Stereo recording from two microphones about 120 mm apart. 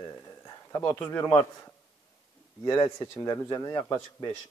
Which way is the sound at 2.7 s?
35° left (ahead or behind).